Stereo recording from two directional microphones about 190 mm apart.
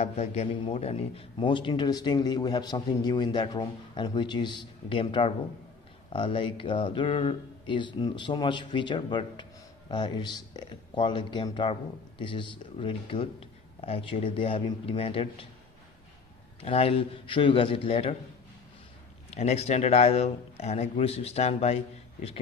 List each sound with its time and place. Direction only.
0.0 s a man's voice: 35° left (ahead or behind)
16.6 s a man's voice: 30° left (ahead or behind)
19.3 s a man's voice: 35° left (ahead or behind)